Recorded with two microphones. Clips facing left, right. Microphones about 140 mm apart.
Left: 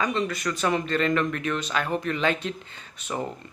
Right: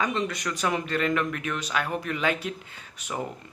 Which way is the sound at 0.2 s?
15° right (ahead or behind).